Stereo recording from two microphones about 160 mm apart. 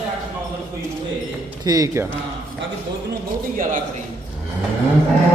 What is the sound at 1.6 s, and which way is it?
Speech, 20° right (ahead or behind).